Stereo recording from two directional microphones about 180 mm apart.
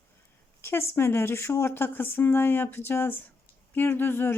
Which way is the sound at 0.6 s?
15° left (ahead or behind).